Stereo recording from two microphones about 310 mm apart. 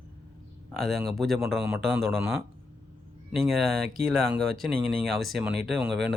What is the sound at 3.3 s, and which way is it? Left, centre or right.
Speech, centre.